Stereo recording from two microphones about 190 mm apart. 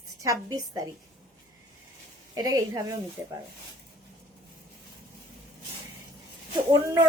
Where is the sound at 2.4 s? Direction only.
20° right (ahead or behind).